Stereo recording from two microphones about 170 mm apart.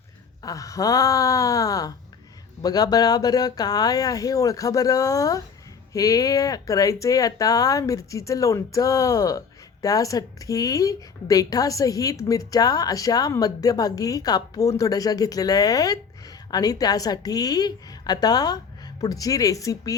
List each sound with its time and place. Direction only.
0.4 s a woman's voice: 20° left (ahead or behind)